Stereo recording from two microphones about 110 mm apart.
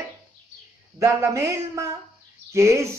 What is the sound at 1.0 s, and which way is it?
Speech, 25° right (ahead or behind).